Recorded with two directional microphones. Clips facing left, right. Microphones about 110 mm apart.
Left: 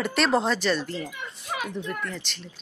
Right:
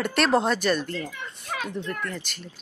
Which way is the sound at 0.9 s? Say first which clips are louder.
Even; 15° left (ahead or behind).